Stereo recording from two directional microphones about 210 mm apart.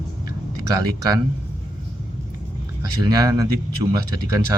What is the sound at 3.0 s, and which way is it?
Speech, 20° right (ahead or behind).